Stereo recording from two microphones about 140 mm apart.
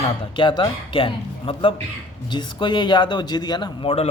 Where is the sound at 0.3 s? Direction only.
35° left (ahead or behind).